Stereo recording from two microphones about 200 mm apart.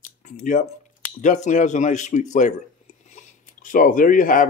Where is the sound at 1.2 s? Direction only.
35° left (ahead or behind).